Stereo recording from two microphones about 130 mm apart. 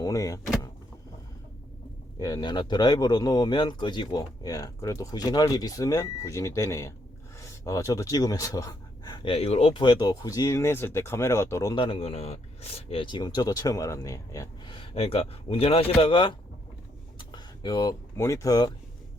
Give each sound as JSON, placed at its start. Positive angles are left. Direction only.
{"t": 0.0, "sound": "speech", "side_deg": 25}
{"t": 2.1, "sound": "speech", "side_deg": 30}
{"t": 11.7, "sound": "speech", "side_deg": 40}
{"t": 12.9, "sound": "speech", "side_deg": 40}
{"t": 14.7, "sound": "speech", "side_deg": 45}